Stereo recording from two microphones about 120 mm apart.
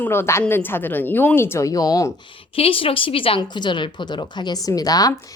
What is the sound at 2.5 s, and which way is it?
Speech, 50° left (ahead or behind).